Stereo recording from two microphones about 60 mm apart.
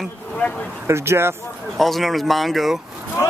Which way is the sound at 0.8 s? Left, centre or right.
Right.